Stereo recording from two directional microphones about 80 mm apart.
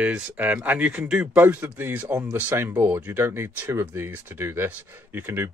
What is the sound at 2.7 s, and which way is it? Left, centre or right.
Speech, centre.